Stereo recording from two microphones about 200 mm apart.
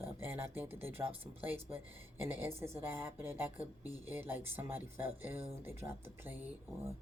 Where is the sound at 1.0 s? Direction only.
30° right (ahead or behind).